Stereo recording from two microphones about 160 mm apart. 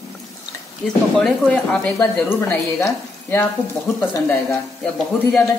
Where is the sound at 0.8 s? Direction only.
Centre (ahead or behind).